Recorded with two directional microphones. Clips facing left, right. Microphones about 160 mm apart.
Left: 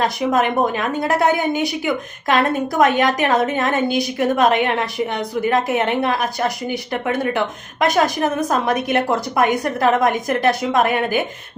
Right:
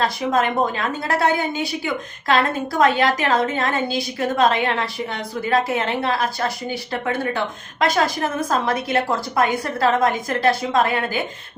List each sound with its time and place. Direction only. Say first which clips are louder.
0.0 s a woman's voice: left 2 dB; 20° left (ahead or behind)